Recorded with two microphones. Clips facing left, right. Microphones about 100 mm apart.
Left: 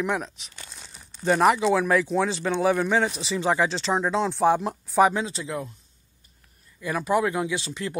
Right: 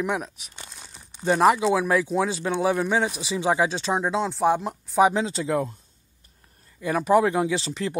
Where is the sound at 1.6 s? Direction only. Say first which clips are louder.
Even; 10° right (ahead or behind).